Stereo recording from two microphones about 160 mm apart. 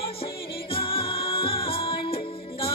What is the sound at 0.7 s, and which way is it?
Music, 35° left (ahead or behind).